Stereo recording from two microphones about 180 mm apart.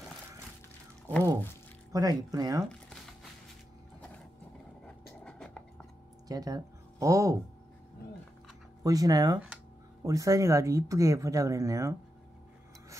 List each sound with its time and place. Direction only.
1.9 s speech: 20° right (ahead or behind)
5.2 s a sound: 5° left (ahead or behind)
6.2 s speech: 20° right (ahead or behind)
8.8 s speech: 20° right (ahead or behind)